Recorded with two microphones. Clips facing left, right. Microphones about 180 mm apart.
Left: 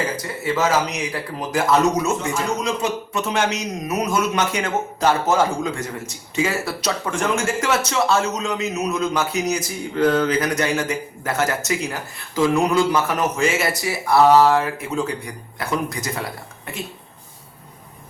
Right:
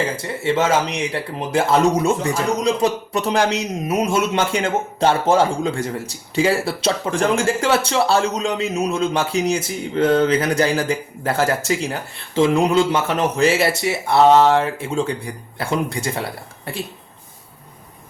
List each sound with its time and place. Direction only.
0.2 s speech: 25° right (ahead or behind)